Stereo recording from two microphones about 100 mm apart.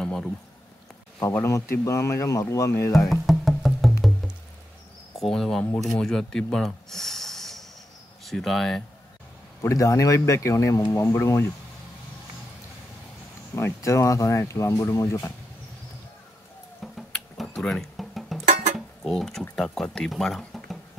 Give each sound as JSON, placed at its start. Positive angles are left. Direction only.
{"t": 0.0, "sound": "a sound", "side_deg": 10}
{"t": 1.2, "sound": "speech", "side_deg": 30}
{"t": 3.1, "sound": "music", "side_deg": 0}
{"t": 5.1, "sound": "speech", "side_deg": 5}
{"t": 9.6, "sound": "speech", "side_deg": 30}
{"t": 13.6, "sound": "speech", "side_deg": 30}
{"t": 16.8, "sound": "a sound", "side_deg": 0}
{"t": 17.6, "sound": "music", "side_deg": 5}
{"t": 19.0, "sound": "speech", "side_deg": 5}